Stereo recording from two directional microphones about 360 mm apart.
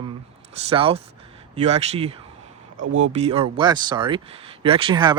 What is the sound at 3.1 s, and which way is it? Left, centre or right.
Speech, centre.